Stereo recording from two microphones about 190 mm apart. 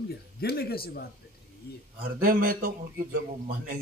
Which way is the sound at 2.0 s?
45° right (ahead or behind).